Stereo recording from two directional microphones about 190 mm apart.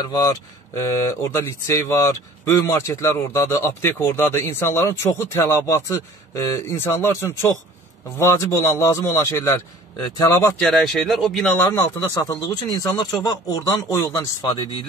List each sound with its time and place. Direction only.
0.0 s speech: 20° left (ahead or behind)
10.7 s speech: centre (ahead or behind); by 14.7 s 20° left (ahead or behind)